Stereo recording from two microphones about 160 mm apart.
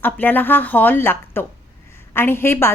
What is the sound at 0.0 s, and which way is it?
A woman's voice, 10° left (ahead or behind).